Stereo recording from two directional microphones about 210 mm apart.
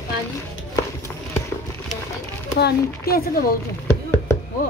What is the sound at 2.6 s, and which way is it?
Speech, 45° left (ahead or behind).